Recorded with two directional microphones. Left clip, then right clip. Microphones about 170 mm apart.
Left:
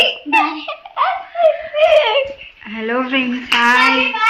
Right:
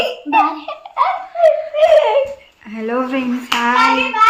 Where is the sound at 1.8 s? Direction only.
15° right (ahead or behind).